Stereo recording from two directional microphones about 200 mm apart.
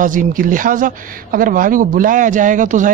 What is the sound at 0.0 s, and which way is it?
Speech, 40° right (ahead or behind).